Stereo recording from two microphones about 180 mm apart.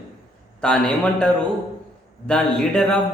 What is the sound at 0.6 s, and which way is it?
Speech, 5° left (ahead or behind).